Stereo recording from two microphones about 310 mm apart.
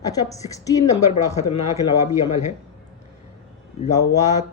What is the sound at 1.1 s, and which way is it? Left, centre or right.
Speech, left.